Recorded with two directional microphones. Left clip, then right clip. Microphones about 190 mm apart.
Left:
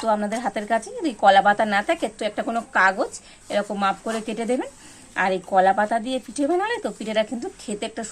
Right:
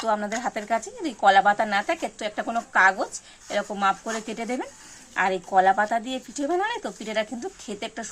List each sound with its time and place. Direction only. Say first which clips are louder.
0.0 s speech: left 3 dB; centre (ahead or behind)